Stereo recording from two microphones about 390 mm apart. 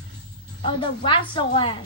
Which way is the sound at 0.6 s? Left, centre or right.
Centre.